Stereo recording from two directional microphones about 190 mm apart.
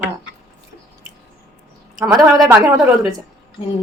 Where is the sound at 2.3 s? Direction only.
20° right (ahead or behind).